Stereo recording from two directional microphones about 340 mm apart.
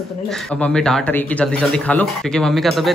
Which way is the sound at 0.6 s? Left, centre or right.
Centre.